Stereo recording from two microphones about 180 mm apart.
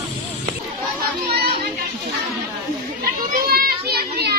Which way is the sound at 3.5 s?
60° right (ahead or behind).